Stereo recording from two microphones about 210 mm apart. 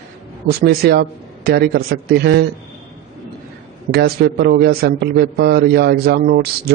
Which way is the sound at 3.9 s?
50° right (ahead or behind).